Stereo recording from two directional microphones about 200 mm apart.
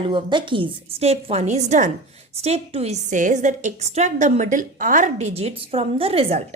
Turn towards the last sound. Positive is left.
turn(degrees=-30)  # may be behind; listen again after turning